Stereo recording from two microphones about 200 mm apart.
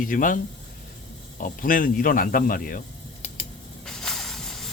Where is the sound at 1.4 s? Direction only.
45° left (ahead or behind).